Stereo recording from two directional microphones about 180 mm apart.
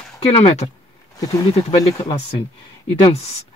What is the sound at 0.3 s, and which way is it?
Speech, 35° left (ahead or behind).